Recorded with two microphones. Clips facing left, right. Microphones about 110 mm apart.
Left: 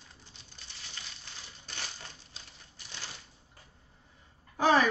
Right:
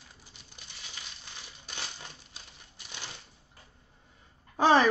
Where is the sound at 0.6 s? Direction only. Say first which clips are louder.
Right 1 dB; 15° right (ahead or behind).